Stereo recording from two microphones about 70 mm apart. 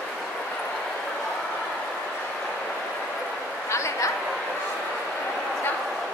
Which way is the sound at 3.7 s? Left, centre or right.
Left.